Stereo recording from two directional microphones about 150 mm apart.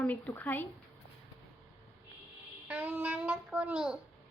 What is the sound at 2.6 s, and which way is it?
A child's voice, 10° right (ahead or behind).